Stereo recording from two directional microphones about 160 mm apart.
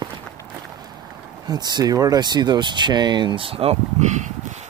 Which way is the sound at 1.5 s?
25° right (ahead or behind).